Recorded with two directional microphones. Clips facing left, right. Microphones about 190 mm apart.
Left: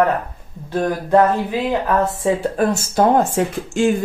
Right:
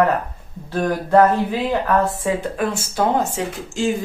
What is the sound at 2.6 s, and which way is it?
Speech, 45° left (ahead or behind).